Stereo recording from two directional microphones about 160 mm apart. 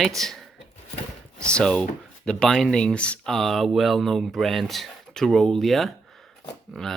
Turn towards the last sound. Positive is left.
turn(degrees=0)  # may be behind; listen again after turning